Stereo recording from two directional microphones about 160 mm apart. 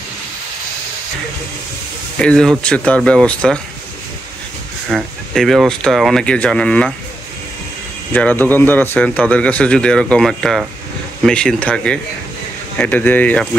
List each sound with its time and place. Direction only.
2.1 s speech: 5° left (ahead or behind)
4.8 s speech: centre (ahead or behind)
8.1 s speech: 10° left (ahead or behind)